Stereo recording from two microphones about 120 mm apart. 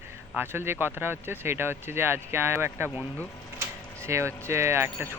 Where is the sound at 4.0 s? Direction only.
25° right (ahead or behind).